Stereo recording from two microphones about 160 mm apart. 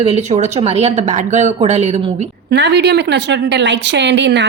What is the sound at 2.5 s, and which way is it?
Speech, 90° right.